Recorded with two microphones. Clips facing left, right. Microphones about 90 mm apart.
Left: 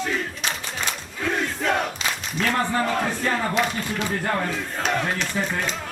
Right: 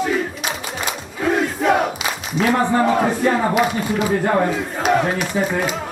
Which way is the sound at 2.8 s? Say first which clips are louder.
Right 7 dB; 25° right (ahead or behind).